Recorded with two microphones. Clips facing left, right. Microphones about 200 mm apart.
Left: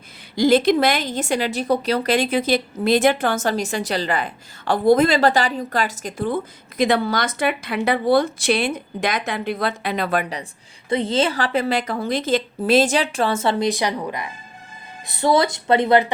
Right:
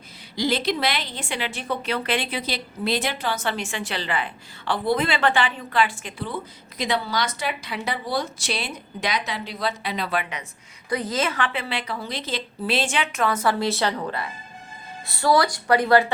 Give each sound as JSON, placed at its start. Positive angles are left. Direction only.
{"t": 0.3, "sound": "a woman's voice", "side_deg": 50}
{"t": 10.8, "sound": "a woman's voice", "side_deg": 25}